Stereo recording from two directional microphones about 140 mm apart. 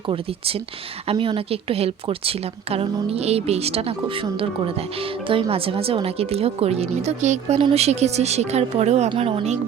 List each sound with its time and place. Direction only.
1.0 s speech: 40° right (ahead or behind)